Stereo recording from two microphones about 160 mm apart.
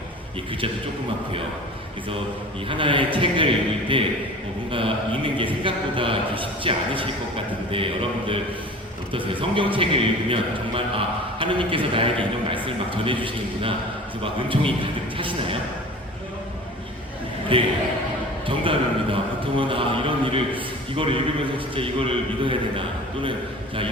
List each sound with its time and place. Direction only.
2.6 s a man's voice: 30° right (ahead or behind)
9.1 s a man's voice: 35° right (ahead or behind)
17.5 s a man's voice: 35° right (ahead or behind)